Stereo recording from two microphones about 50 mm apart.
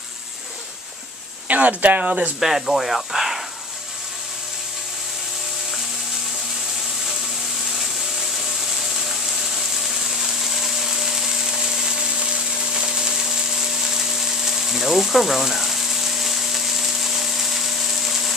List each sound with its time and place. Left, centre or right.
1.5 s speech: right
2.4 s speech: centre
8.7 s a sound: centre